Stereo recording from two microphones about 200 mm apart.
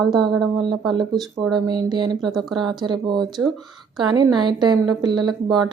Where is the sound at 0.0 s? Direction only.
Centre (ahead or behind).